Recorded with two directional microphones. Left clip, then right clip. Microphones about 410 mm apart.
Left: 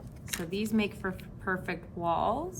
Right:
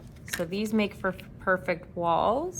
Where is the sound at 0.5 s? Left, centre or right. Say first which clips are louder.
Right 1 dB; centre.